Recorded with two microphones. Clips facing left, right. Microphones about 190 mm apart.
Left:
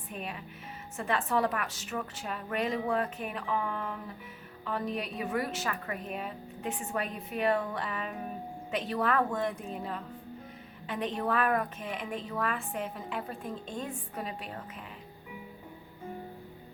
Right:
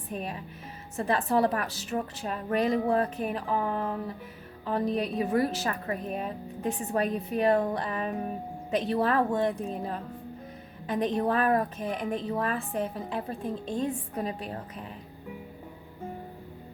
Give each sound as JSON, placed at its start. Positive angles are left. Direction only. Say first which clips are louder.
{"t": 0.1, "sound": "a woman's voice", "louder": "right 5 dB", "side_deg": -35}